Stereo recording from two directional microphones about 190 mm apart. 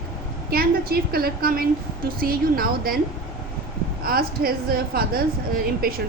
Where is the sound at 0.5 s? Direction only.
55° right (ahead or behind).